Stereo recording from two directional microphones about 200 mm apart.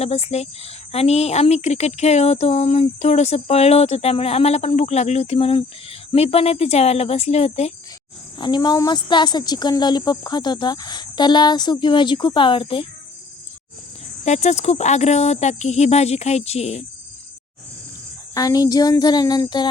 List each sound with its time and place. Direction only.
0.0 s a woman's voice: 30° left (ahead or behind)
14.3 s speech: 35° left (ahead or behind)
18.3 s a woman's voice: 20° left (ahead or behind)